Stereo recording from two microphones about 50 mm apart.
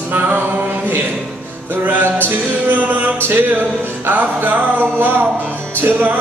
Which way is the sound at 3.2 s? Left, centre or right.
Right.